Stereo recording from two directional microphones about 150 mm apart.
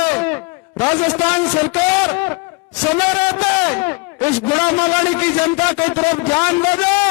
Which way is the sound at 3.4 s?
15° left (ahead or behind).